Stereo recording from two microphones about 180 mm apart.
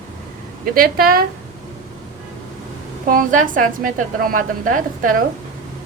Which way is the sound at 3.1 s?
50° right (ahead or behind).